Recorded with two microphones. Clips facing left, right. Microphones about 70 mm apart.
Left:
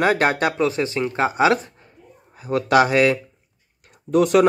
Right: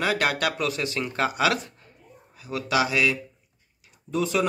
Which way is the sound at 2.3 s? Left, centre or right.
Left.